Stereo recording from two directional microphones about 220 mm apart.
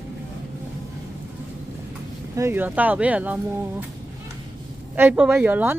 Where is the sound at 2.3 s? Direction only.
10° right (ahead or behind).